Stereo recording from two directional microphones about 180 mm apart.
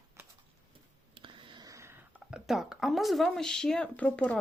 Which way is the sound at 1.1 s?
30° right (ahead or behind).